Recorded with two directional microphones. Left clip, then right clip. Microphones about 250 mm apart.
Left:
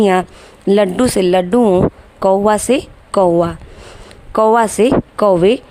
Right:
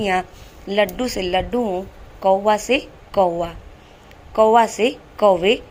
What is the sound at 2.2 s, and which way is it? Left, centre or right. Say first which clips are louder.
A woman's voice: left 4 dB; left.